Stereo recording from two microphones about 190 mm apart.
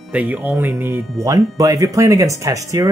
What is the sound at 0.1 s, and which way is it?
Speech, 5° right (ahead or behind).